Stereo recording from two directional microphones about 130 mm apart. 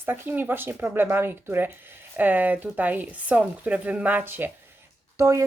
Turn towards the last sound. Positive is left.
turn(degrees=-20)  # may be behind; listen again after turning